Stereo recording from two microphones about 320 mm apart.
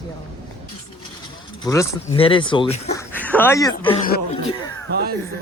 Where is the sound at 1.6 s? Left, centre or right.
Centre.